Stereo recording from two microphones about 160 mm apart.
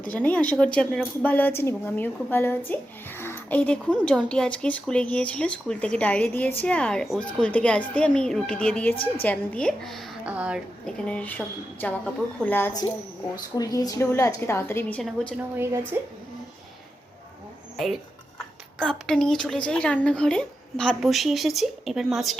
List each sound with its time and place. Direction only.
0.1 s a woman's voice: 10° left (ahead or behind); by 10.6 s 5° right (ahead or behind)
10.8 s a woman's voice: 5° left (ahead or behind)
13.3 s a woman's voice: 25° left (ahead or behind); by 15.4 s 5° left (ahead or behind)
15.5 s a woman's voice: 15° right (ahead or behind)
18.8 s speech: 5° left (ahead or behind)